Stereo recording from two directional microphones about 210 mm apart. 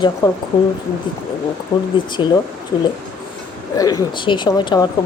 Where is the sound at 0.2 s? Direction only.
20° left (ahead or behind).